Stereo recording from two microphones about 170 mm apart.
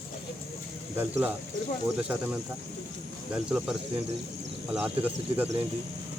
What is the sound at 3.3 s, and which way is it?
Speech, 5° right (ahead or behind).